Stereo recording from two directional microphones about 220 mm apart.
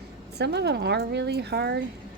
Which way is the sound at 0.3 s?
50° right (ahead or behind).